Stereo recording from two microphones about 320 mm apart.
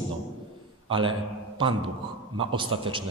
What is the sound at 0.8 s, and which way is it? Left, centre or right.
Speech, centre.